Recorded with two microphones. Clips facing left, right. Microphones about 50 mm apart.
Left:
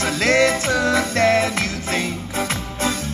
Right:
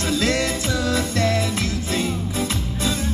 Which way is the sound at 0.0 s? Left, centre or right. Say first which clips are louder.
Left 5 dB; left.